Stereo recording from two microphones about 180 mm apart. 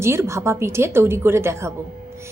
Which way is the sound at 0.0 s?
15° right (ahead or behind).